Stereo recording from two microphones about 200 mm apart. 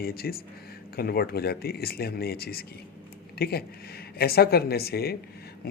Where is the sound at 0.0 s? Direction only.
50° left (ahead or behind).